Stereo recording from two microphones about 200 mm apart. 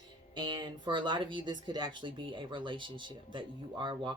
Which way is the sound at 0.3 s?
20° right (ahead or behind).